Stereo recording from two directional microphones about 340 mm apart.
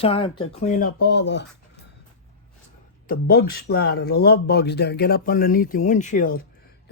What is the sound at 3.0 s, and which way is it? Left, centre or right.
Speech, left.